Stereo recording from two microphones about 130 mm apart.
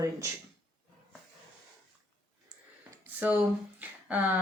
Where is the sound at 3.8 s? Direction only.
10° right (ahead or behind).